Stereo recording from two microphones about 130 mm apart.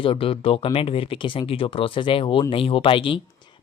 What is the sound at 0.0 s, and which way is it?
Speech, 45° left (ahead or behind).